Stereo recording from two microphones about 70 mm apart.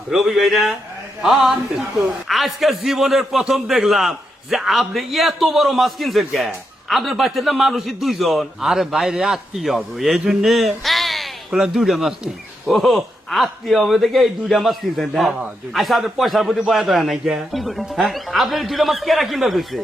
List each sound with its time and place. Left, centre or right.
0.1 s a man's voice: centre